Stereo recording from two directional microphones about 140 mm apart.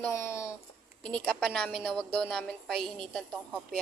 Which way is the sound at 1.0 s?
5° left (ahead or behind).